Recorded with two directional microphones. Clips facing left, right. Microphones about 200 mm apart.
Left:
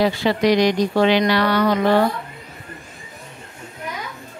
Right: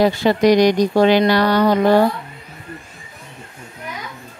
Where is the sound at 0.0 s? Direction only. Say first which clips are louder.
Right 3 dB; 45° right (ahead or behind).